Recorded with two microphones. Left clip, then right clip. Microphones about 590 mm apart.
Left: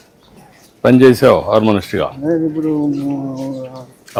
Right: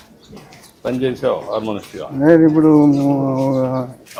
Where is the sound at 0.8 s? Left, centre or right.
Left.